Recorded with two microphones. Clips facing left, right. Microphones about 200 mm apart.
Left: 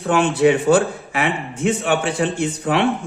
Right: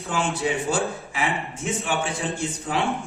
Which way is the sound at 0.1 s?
65° left (ahead or behind).